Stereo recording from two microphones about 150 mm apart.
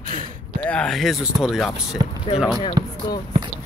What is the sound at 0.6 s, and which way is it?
Speech, 10° left (ahead or behind).